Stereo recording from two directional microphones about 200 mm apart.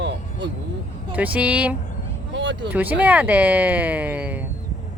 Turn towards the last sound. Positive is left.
turn(degrees=-5)  # may be behind; listen again after turning